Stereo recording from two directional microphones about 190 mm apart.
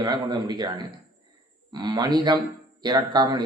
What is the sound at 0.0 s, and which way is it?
A man's voice, 20° right (ahead or behind).